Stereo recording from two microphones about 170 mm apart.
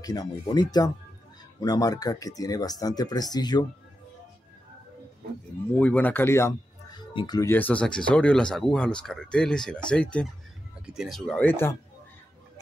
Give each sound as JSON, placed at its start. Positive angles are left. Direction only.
{"t": 0.0, "sound": "speech", "side_deg": 20}
{"t": 5.8, "sound": "speech", "side_deg": 10}
{"t": 7.5, "sound": "speech", "side_deg": 10}